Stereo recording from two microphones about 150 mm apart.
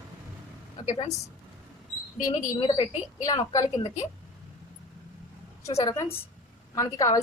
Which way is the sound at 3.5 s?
25° left (ahead or behind).